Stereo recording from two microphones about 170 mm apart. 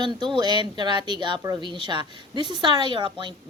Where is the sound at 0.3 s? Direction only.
25° right (ahead or behind).